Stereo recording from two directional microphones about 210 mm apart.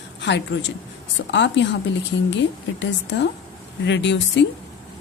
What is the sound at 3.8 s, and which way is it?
Speech, 60° left (ahead or behind).